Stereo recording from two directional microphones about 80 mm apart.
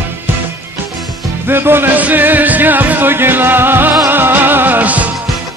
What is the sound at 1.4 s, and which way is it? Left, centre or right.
Music, right.